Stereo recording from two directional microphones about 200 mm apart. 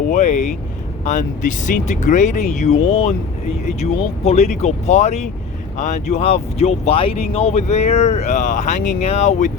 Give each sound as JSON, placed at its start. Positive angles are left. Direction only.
{"t": 0.1, "sound": "speech", "side_deg": 35}